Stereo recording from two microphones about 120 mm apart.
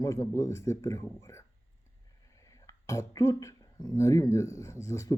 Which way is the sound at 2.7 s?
25° left (ahead or behind).